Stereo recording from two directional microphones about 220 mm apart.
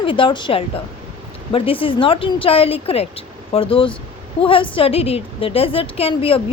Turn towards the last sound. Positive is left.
turn(degrees=25)  # may be behind; listen again after turning